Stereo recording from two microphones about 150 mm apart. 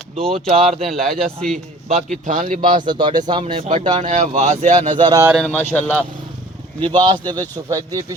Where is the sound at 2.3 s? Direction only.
60° right (ahead or behind).